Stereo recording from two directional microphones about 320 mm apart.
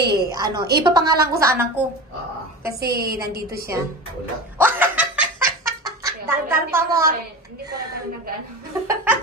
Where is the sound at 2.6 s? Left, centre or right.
Right.